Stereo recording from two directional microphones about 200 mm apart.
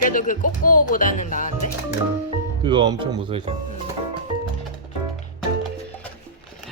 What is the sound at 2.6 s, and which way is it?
Speech, 25° right (ahead or behind).